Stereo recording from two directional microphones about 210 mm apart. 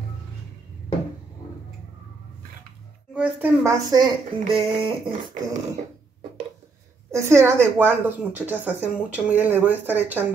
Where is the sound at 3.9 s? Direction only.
20° right (ahead or behind).